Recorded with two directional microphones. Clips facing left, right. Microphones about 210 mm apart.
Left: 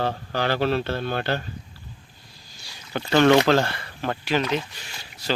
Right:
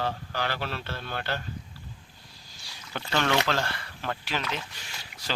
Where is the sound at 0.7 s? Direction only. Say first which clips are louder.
Left 11 dB; 65° left (ahead or behind).